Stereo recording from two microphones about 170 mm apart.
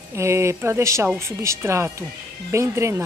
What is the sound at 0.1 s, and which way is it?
Speech, 15° right (ahead or behind).